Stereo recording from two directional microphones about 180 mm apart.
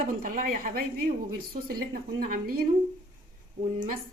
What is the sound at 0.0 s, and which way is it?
A woman's voice, 50° right (ahead or behind).